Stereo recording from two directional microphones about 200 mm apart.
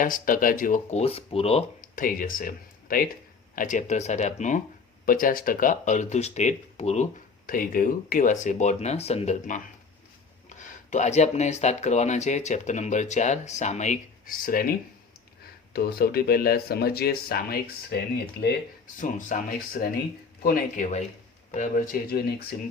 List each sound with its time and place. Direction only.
0.0 s speech: 40° left (ahead or behind)
2.0 s speech: 45° left (ahead or behind)
18.9 s speech: 40° left (ahead or behind)